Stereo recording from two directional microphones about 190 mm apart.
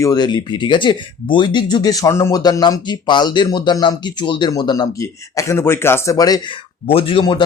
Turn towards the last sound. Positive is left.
turn(degrees=25)  # may be behind; listen again after turning